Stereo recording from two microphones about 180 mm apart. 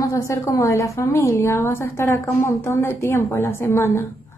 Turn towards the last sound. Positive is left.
turn(degrees=15)  # may be behind; listen again after turning